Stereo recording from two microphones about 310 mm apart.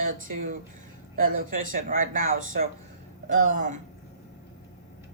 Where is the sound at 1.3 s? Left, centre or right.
Right.